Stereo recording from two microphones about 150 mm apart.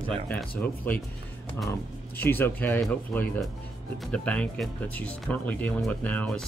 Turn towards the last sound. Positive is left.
turn(degrees=10)  # may be behind; listen again after turning